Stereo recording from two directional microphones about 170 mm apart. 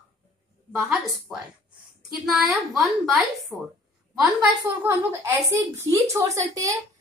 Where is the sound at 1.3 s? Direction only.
15° right (ahead or behind).